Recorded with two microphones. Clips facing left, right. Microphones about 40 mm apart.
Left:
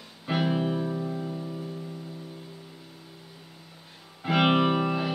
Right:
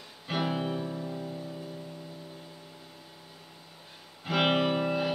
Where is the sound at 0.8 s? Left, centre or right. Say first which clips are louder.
Left 5 dB; left.